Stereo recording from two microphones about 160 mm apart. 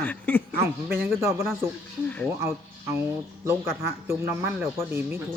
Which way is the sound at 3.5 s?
15° right (ahead or behind).